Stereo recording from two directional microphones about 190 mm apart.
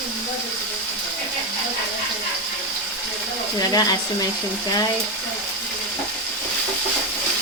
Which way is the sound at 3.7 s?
20° left (ahead or behind).